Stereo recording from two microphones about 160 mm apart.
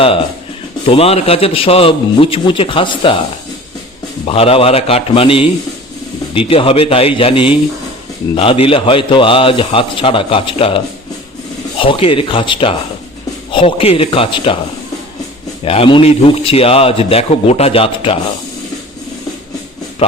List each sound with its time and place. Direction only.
0.9 s a man's voice: 40° left (ahead or behind)
4.3 s a man's voice: 35° left (ahead or behind)
15.6 s a man's voice: 35° left (ahead or behind)
20.0 s a man's voice: 40° left (ahead or behind)